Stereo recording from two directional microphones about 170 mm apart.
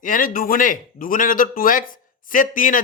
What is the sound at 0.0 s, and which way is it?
Speech, 55° left (ahead or behind).